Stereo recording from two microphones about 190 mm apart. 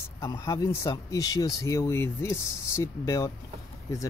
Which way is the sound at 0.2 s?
15° left (ahead or behind).